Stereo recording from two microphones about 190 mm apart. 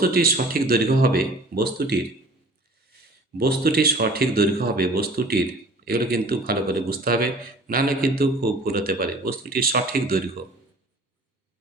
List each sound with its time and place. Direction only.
0.0 s speech: 50° right (ahead or behind)
3.3 s speech: 55° right (ahead or behind)